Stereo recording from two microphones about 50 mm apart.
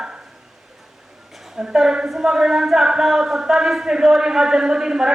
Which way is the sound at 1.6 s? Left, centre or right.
Centre.